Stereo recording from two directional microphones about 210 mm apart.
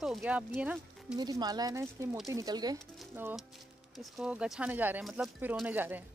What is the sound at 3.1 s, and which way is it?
Speech, 10° right (ahead or behind).